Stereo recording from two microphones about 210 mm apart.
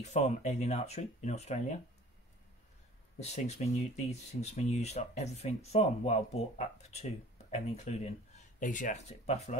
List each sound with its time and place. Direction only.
0.0 s speech: 30° left (ahead or behind)
3.2 s speech: 30° left (ahead or behind)